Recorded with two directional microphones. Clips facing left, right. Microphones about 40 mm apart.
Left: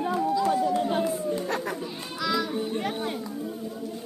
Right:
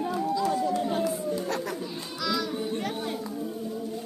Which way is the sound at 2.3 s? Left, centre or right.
Left.